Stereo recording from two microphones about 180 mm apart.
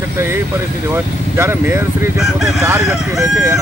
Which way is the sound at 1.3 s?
15° right (ahead or behind).